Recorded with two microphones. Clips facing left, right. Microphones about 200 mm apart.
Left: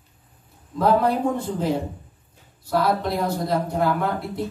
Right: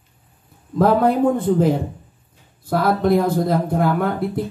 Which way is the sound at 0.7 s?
50° right (ahead or behind).